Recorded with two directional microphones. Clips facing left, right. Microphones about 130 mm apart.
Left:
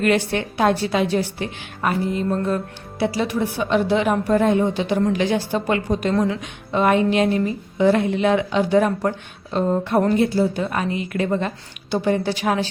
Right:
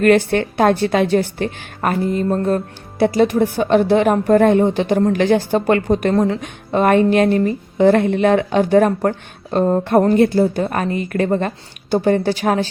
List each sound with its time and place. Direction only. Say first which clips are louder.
0.0 s a woman's voice: right 6 dB; 50° right (ahead or behind)